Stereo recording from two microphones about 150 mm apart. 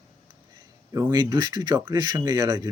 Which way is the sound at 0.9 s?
25° right (ahead or behind).